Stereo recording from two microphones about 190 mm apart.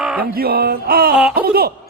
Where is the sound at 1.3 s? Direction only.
55° right (ahead or behind).